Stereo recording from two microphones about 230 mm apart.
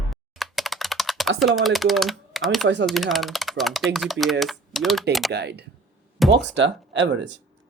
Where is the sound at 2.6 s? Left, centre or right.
Right.